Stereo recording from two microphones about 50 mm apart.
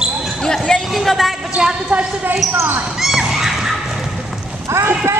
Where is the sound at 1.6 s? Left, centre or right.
Centre.